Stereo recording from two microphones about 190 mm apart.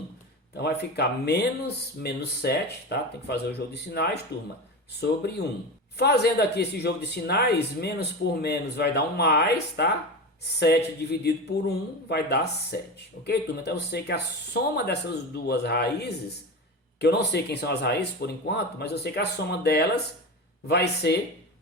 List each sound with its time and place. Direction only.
0.5 s speech: 60° left (ahead or behind)
11.2 s speech: 60° left (ahead or behind)